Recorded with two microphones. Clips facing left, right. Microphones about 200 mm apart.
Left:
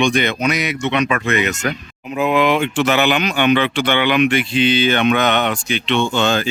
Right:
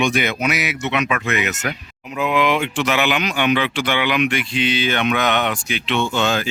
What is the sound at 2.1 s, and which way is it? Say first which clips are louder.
Speech: left 3 dB; 40° left (ahead or behind).